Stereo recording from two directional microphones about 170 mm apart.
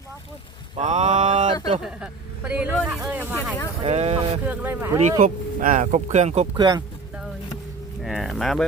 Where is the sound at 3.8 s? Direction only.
35° right (ahead or behind).